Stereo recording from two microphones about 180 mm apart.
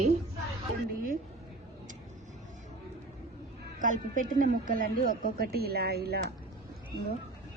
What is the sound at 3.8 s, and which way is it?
A woman's voice, 45° right (ahead or behind).